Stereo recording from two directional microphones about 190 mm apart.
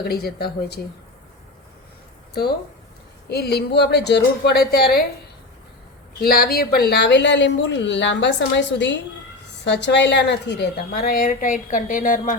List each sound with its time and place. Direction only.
0.0 s a woman's voice: 55° left (ahead or behind)
3.2 s a woman's voice: 60° left (ahead or behind)
6.1 s a woman's voice: 50° left (ahead or behind)